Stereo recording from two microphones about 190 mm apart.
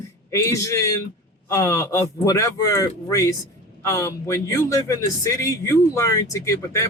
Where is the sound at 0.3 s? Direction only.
15° left (ahead or behind).